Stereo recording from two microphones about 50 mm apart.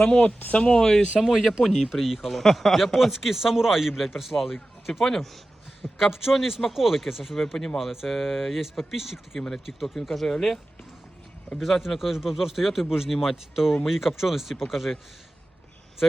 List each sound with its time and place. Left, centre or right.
0.5 s speech: left
1.2 s speech: centre
2.2 s speech: centre
6.0 s speech: centre
11.6 s speech: centre